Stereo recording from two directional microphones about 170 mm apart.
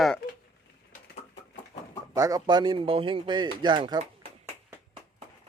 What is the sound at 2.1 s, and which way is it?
Speech, 20° right (ahead or behind).